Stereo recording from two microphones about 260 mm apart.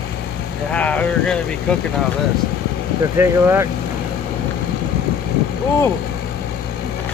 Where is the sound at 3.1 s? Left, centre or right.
Centre.